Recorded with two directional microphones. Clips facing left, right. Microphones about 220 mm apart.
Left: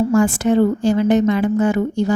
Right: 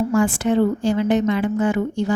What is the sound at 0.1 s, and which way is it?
A woman's voice, 45° left (ahead or behind).